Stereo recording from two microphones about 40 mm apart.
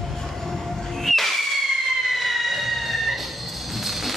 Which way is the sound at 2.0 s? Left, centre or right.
Centre.